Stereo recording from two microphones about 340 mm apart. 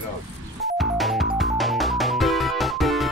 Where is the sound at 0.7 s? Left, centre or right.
Centre.